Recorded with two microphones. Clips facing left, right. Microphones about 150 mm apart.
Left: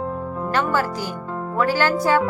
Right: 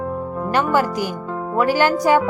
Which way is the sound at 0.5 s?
15° right (ahead or behind).